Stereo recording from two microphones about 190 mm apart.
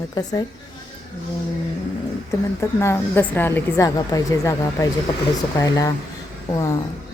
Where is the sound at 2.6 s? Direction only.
15° left (ahead or behind).